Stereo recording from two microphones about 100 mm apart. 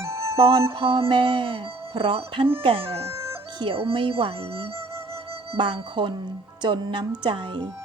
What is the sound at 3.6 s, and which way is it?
Music, 65° right (ahead or behind).